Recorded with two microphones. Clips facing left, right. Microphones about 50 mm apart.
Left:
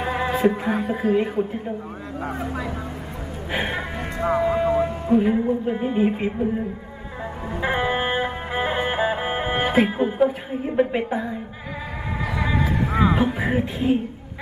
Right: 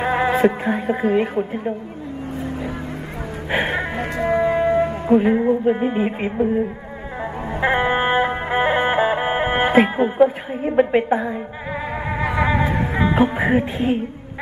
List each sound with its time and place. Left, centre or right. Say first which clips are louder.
0.0 s music: right 5 dB; right
0.7 s a woman's voice: right 2 dB; right
3.5 s a woman's voice: right 5 dB; right
4.4 s music: right 3 dB; right
5.7 s a woman's voice: right 3 dB; right
7.6 s music: right 4 dB; right
10.8 s a woman's voice: right 5 dB; right
12.2 s a sound: right 5 dB; right
13.1 s speech: right 4 dB; right